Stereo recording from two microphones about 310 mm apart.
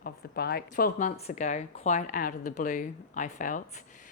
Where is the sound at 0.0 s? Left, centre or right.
Left.